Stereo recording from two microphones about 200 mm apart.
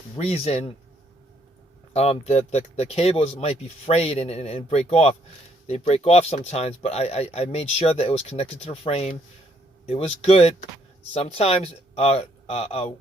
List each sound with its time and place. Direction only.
0.2 s speech: 30° left (ahead or behind)
1.9 s speech: 30° left (ahead or behind)